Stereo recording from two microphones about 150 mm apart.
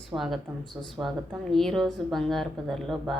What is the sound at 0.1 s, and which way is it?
Speech, 20° right (ahead or behind).